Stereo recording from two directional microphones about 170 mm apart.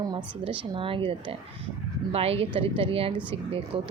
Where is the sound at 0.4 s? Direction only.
30° right (ahead or behind).